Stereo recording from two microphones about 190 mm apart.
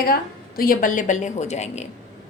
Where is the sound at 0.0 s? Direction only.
50° left (ahead or behind).